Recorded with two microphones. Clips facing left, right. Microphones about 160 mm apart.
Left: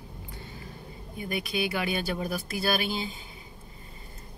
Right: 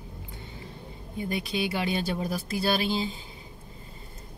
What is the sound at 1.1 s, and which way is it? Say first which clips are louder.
Speech: right 1 dB; 30° right (ahead or behind).